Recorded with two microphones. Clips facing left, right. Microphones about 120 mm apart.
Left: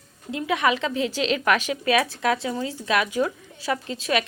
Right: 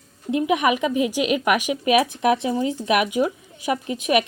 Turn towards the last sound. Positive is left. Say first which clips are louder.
# right 4 dB
turn(degrees=-15)  # may be behind; listen again after turning